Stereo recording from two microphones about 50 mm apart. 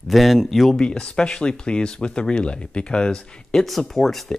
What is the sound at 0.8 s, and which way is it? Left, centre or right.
Speech, centre.